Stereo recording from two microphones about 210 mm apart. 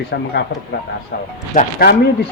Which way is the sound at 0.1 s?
55° left (ahead or behind).